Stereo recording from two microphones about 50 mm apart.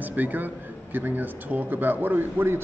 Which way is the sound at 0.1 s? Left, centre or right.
Right.